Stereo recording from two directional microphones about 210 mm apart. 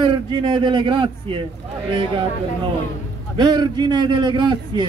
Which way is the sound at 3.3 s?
20° right (ahead or behind).